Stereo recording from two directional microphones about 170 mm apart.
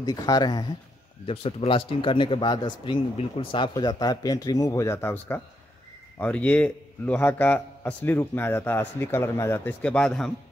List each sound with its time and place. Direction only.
0.0 s speech: 20° left (ahead or behind)
1.2 s a man's voice: 35° left (ahead or behind); by 10.3 s 5° left (ahead or behind)